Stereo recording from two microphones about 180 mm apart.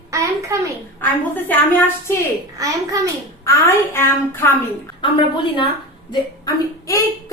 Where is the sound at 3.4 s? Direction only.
15° left (ahead or behind).